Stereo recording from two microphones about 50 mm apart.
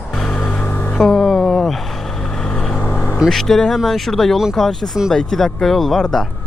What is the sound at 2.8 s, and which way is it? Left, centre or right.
Vehicle, left.